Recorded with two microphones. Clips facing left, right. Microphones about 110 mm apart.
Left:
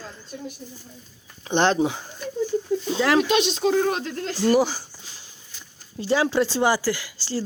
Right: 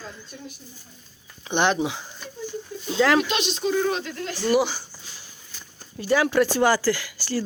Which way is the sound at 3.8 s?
45° left (ahead or behind).